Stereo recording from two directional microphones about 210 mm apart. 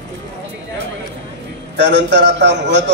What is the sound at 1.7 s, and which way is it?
A man's voice, 55° right (ahead or behind).